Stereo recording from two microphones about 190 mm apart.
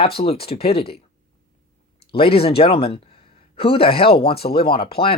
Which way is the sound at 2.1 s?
30° left (ahead or behind).